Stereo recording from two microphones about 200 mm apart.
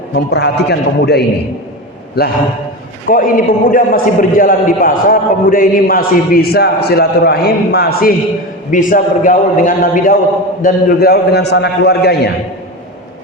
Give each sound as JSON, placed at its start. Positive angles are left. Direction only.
{"t": 0.1, "sound": "a man's voice", "side_deg": 55}